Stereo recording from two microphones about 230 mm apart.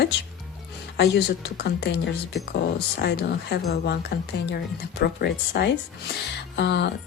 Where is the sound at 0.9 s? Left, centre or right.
Left.